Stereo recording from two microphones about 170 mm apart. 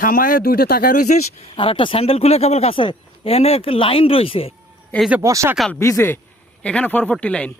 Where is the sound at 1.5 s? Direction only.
30° left (ahead or behind).